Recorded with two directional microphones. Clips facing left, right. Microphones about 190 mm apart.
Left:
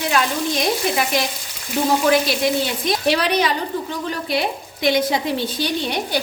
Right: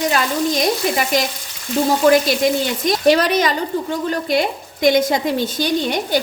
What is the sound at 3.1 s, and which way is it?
A woman's voice, 45° right (ahead or behind).